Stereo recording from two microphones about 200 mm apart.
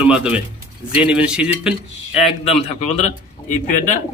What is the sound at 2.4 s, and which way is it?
Speech, 30° left (ahead or behind).